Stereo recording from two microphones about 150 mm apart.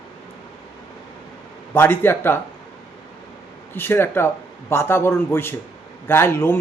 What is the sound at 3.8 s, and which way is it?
A man's voice, 15° left (ahead or behind).